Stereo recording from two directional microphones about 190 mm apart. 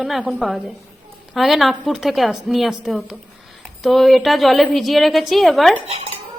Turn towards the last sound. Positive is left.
turn(degrees=-30)  # may be behind; listen again after turning